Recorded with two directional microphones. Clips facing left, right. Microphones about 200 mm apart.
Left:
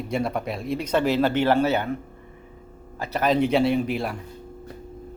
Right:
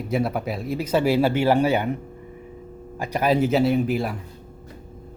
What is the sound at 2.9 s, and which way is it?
Speech, 15° right (ahead or behind).